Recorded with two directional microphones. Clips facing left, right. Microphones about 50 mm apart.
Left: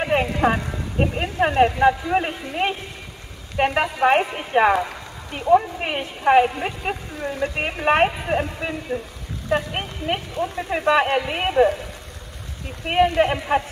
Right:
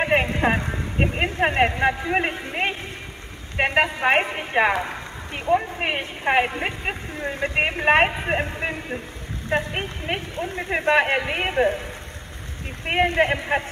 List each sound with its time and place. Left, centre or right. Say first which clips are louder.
0.0 s a woman's voice: left 1 dB; right
4.8 s a sound: right 2 dB; right
5.8 s a woman's voice: right 1 dB; right
12.8 s speech: left 2 dB; right